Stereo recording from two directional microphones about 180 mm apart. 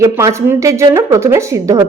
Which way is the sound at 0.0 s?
15° right (ahead or behind).